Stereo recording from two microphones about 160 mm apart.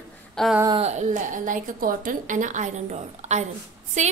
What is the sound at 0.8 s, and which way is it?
A woman's voice, 45° right (ahead or behind).